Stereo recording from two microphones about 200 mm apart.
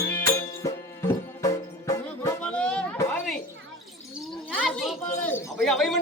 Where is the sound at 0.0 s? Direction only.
10° left (ahead or behind).